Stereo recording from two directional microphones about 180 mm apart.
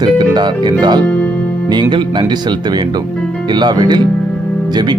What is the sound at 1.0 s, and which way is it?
Speech, 5° left (ahead or behind).